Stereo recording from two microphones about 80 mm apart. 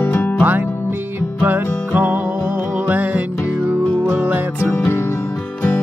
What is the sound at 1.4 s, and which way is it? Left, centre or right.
Music, right.